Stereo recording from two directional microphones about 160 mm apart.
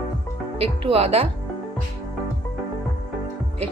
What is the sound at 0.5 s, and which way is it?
Speech, 35° right (ahead or behind).